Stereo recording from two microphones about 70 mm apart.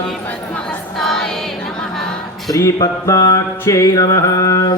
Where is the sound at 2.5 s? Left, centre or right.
Left.